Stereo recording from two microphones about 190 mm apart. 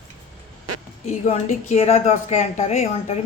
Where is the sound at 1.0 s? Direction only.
35° left (ahead or behind).